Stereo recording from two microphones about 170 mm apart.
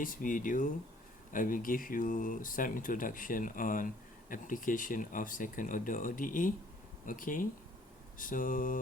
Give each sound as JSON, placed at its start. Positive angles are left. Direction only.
{"t": 0.0, "sound": "speech", "side_deg": 55}